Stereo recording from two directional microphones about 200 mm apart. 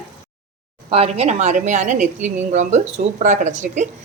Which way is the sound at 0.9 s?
30° right (ahead or behind).